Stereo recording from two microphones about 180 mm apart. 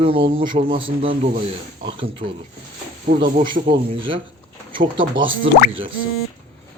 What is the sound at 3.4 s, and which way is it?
Speech, 25° right (ahead or behind).